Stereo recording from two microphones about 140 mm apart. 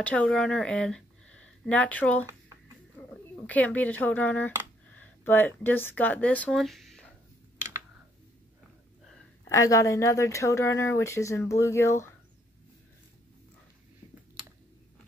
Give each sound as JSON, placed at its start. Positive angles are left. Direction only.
{"t": 0.0, "sound": "speech", "side_deg": 10}
{"t": 9.5, "sound": "speech", "side_deg": 20}